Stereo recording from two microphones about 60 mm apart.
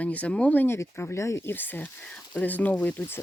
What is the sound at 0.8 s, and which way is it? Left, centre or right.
Speech, left.